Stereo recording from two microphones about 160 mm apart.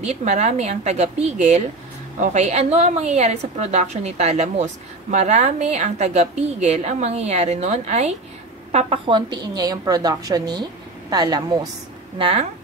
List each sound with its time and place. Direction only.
0.0 s a woman's voice: 45° right (ahead or behind); by 11.6 s 25° right (ahead or behind)
12.2 s speech: 35° right (ahead or behind)